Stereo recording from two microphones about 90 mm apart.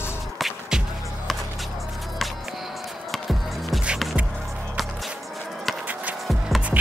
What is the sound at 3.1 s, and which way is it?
Music, centre (ahead or behind).